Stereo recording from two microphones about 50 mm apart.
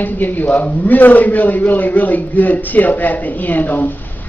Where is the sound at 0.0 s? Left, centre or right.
Left.